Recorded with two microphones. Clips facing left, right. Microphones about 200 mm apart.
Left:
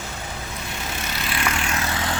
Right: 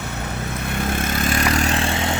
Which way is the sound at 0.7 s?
55° right (ahead or behind).